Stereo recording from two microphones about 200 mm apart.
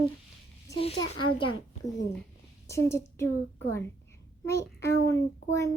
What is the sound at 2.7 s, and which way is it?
Speech, 15° left (ahead or behind).